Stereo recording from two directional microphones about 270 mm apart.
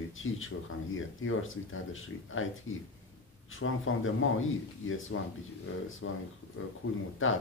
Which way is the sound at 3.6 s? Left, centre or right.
Left.